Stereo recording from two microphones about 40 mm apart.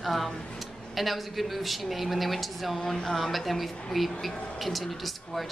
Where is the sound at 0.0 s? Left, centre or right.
Centre.